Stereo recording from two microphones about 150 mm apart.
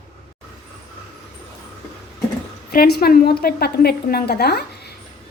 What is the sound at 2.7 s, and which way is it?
A woman's voice, 90° left.